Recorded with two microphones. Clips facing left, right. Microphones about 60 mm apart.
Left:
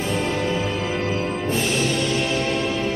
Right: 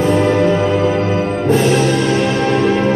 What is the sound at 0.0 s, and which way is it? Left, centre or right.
Music, right.